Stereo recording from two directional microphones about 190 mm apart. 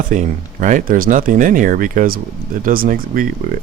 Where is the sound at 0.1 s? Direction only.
40° right (ahead or behind).